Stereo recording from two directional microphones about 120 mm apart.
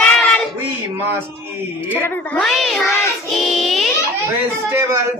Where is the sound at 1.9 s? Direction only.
15° left (ahead or behind).